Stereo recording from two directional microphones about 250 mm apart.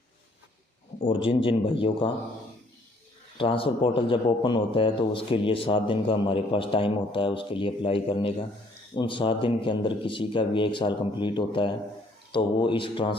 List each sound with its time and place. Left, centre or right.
0.9 s a man's voice: left
3.3 s a man's voice: left